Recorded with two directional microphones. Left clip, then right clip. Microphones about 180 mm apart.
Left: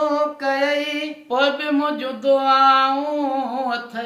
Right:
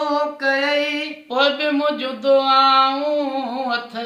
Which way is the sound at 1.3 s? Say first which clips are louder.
Right 1 dB; centre (ahead or behind).